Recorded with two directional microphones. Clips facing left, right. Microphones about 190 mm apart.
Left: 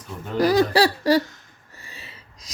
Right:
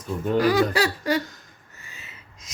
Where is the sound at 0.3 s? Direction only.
40° left (ahead or behind).